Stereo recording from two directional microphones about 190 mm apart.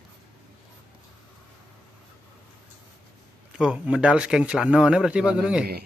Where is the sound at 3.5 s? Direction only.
5° right (ahead or behind).